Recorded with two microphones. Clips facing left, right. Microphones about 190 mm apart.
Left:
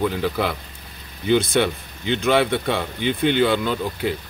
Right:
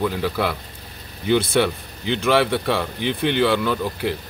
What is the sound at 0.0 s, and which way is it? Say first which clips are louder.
A man's voice: even; centre (ahead or behind).